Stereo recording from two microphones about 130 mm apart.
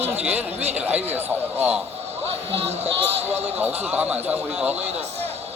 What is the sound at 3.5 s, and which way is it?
A man's voice, 15° right (ahead or behind).